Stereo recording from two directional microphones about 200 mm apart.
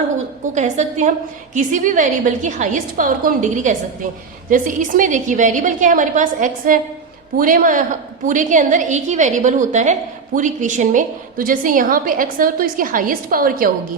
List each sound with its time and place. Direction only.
0.5 s a woman's voice: 35° right (ahead or behind)